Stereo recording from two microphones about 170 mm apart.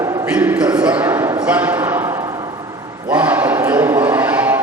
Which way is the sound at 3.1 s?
10° right (ahead or behind).